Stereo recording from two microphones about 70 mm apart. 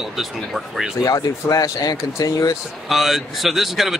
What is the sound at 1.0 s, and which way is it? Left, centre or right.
Speech, left.